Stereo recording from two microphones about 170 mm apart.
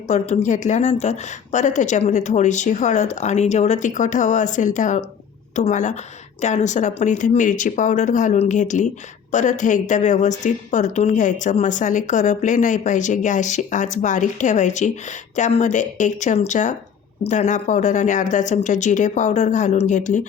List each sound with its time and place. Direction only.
0.1 s a woman's voice: 45° left (ahead or behind)